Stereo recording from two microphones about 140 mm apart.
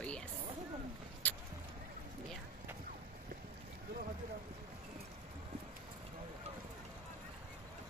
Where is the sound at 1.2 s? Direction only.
10° left (ahead or behind).